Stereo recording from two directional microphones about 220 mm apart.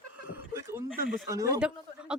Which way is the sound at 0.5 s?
10° right (ahead or behind).